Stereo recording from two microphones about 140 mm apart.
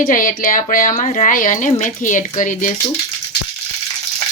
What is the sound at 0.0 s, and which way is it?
A woman's voice, 75° left (ahead or behind).